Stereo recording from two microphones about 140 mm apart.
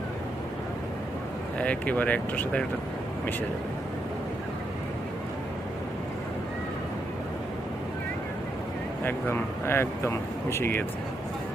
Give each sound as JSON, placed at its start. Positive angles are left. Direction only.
{"t": 1.5, "sound": "speech", "side_deg": 10}
{"t": 9.0, "sound": "speech", "side_deg": 15}